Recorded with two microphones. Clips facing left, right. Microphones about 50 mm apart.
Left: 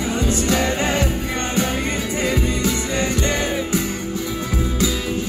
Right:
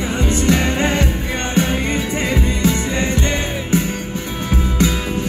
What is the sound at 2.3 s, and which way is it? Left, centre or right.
Music, right.